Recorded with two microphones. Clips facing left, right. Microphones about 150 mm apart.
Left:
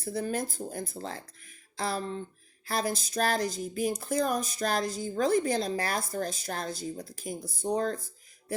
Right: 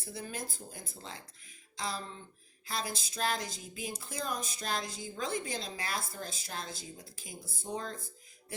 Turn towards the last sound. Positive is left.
turn(degrees=50)  # may be behind; listen again after turning